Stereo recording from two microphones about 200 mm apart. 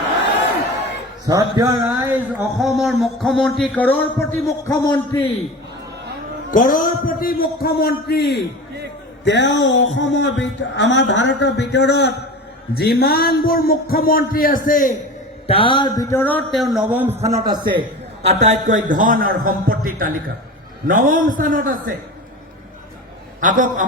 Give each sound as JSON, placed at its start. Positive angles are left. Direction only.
{"t": 1.3, "sound": "speech", "side_deg": -15}
{"t": 2.6, "sound": "a sound", "side_deg": 0}
{"t": 3.8, "sound": "a man's voice", "side_deg": 10}
{"t": 4.9, "sound": "a man's voice", "side_deg": 25}
{"t": 6.5, "sound": "speech", "side_deg": 40}
{"t": 15.4, "sound": "a man's voice", "side_deg": 25}
{"t": 17.2, "sound": "a man's voice", "side_deg": -20}
{"t": 18.3, "sound": "a man's voice", "side_deg": -35}
{"t": 23.4, "sound": "a man's voice", "side_deg": -40}